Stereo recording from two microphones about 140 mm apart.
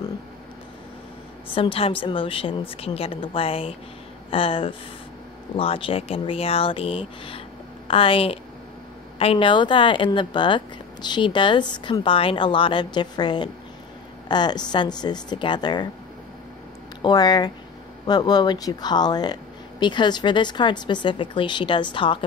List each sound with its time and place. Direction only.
1.5 s speech: 40° left (ahead or behind)
17.0 s speech: 30° left (ahead or behind)